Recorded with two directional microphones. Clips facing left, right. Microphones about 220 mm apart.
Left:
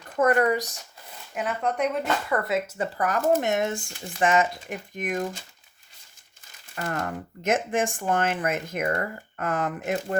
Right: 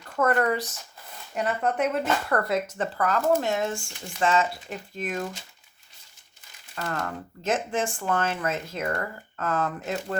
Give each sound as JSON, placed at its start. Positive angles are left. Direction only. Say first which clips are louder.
{"t": 0.2, "sound": "speech", "louder": "left 2 dB", "side_deg": 15}
{"t": 1.4, "sound": "speech", "louder": "right 1 dB", "side_deg": -5}
{"t": 7.0, "sound": "speech", "louder": "left 2 dB", "side_deg": 15}